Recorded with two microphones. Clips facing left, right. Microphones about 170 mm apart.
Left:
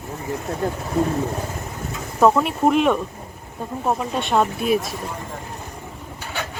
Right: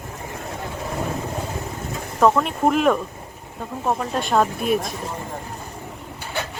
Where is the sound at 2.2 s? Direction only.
5° left (ahead or behind).